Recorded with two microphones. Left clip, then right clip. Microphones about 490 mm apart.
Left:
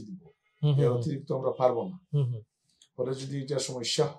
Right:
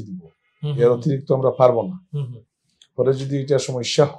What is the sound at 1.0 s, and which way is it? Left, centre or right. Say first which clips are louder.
Speech: right 12 dB; right.